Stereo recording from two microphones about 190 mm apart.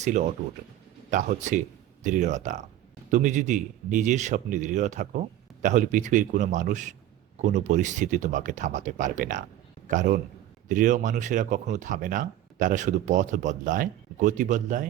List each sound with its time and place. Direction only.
0.0 s a man's voice: 40° right (ahead or behind)